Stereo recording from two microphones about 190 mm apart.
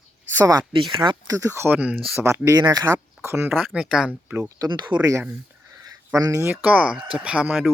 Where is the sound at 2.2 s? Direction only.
15° right (ahead or behind).